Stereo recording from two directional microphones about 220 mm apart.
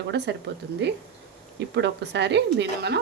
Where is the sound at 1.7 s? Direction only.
50° right (ahead or behind).